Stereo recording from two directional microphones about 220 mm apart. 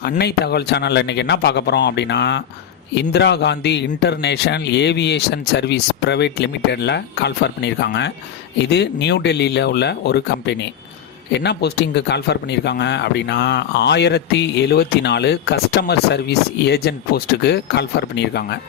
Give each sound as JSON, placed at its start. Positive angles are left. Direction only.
{"t": 0.0, "sound": "speech", "side_deg": 45}